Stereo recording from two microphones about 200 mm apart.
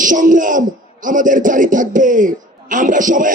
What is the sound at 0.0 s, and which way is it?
A man's voice, 40° right (ahead or behind).